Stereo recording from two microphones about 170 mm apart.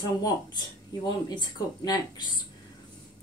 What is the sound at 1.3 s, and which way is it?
Speech, 25° left (ahead or behind).